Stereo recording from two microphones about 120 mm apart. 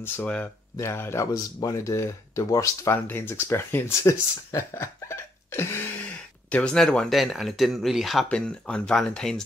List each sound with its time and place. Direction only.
0.0 s speech: 10° left (ahead or behind)
6.5 s speech: 5° left (ahead or behind)